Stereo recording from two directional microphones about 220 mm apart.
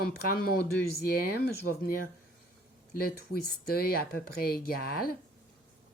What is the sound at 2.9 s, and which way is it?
Speech, 45° left (ahead or behind).